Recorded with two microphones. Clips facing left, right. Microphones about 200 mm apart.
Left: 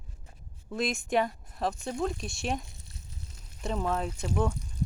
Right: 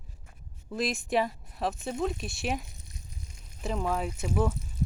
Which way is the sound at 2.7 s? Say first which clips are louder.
Right 1 dB; 15° right (ahead or behind).